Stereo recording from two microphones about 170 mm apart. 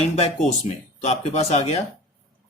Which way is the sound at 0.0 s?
35° left (ahead or behind).